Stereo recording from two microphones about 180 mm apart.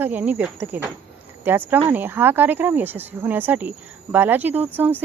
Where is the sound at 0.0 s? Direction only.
10° right (ahead or behind).